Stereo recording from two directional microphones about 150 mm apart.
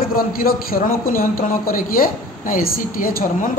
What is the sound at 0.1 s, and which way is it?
A man's voice, 75° left (ahead or behind).